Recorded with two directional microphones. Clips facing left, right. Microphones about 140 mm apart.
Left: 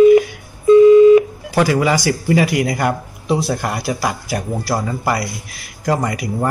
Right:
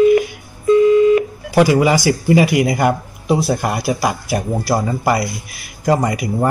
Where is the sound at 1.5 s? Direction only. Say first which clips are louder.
Right 3 dB; 15° right (ahead or behind).